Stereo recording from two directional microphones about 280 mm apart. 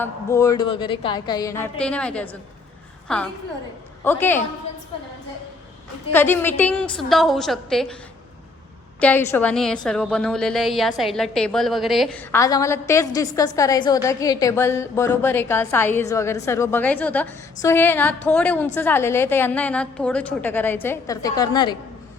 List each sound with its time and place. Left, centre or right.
0.0 s a woman's voice: centre
6.1 s a woman's voice: centre
9.0 s a woman's voice: centre